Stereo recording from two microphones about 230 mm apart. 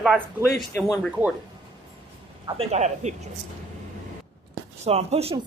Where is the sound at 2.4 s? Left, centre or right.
Right.